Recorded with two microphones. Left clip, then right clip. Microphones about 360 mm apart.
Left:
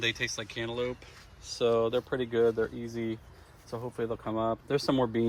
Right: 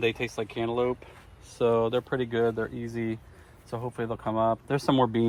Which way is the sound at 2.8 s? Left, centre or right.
Right.